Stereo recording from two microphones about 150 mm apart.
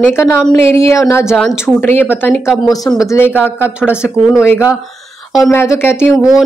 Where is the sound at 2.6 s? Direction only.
25° left (ahead or behind).